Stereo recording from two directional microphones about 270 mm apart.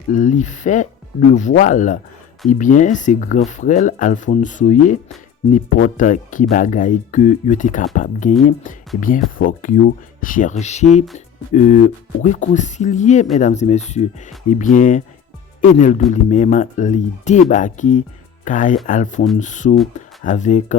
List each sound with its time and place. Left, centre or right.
0.1 s speech: left
12.2 s speech: left